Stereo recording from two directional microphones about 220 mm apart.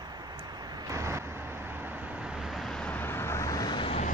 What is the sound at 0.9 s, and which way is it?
Vehicle, 10° right (ahead or behind).